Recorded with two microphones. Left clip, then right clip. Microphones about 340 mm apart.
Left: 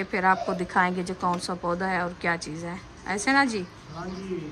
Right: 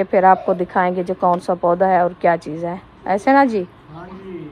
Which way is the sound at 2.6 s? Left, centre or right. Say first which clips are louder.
Right 11 dB; centre.